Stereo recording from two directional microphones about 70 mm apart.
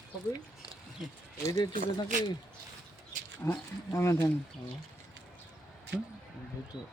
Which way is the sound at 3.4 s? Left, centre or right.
Left.